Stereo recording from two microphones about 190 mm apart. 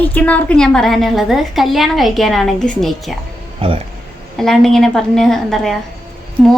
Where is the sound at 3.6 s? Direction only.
30° right (ahead or behind).